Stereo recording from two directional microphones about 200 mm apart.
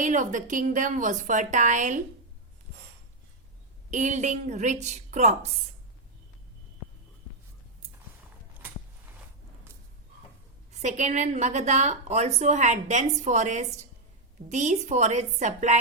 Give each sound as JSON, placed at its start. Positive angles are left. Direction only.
{"t": 0.0, "sound": "a woman's voice", "side_deg": -40}
{"t": 3.9, "sound": "a woman's voice", "side_deg": -35}
{"t": 10.7, "sound": "a woman's voice", "side_deg": -35}